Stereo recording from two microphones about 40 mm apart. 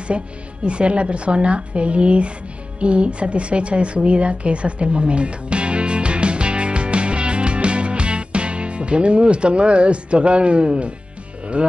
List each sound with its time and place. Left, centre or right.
0.1 s speech: right
2.8 s a sound: right
11.6 s music: right